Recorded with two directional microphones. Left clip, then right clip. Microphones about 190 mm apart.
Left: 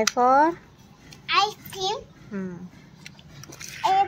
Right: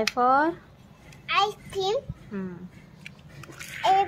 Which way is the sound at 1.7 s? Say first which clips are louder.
Right 1 dB; 25° right (ahead or behind).